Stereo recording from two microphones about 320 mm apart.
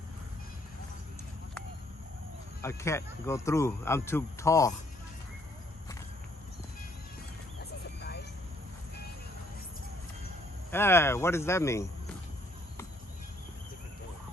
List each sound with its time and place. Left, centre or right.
2.6 s speech: centre
8.0 s vehicle: left
10.7 s speech: centre